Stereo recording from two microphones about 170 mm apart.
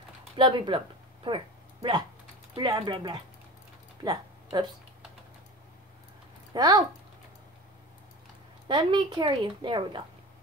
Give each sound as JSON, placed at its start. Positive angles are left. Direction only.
{"t": 0.4, "sound": "a woman's voice", "side_deg": -30}
{"t": 4.0, "sound": "a sound", "side_deg": -25}
{"t": 6.5, "sound": "speech", "side_deg": -20}
{"t": 8.6, "sound": "a woman's voice", "side_deg": -25}